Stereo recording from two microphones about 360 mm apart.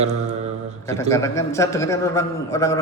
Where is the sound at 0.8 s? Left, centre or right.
Centre.